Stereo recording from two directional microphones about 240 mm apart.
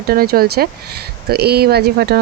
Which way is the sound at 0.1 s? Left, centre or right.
Right.